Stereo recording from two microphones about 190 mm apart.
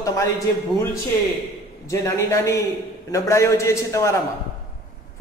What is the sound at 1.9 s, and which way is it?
A man's voice, 20° left (ahead or behind).